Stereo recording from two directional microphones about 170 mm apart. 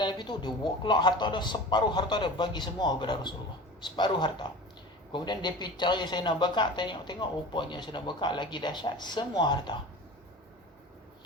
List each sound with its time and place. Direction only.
0.0 s speech: 25° left (ahead or behind)